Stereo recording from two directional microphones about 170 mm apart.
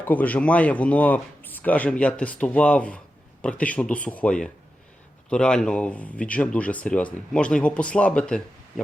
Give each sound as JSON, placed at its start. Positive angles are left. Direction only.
{"t": 0.0, "sound": "speech", "side_deg": 10}